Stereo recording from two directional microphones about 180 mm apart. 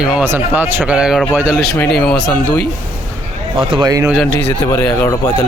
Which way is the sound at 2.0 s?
5° left (ahead or behind).